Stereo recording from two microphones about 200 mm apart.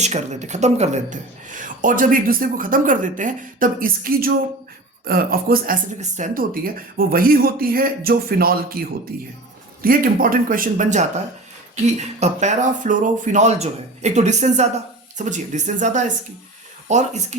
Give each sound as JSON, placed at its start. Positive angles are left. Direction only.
{"t": 0.0, "sound": "speech", "side_deg": -35}
{"t": 9.8, "sound": "speech", "side_deg": -45}